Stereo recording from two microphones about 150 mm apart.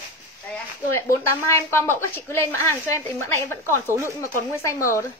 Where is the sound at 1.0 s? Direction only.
20° left (ahead or behind).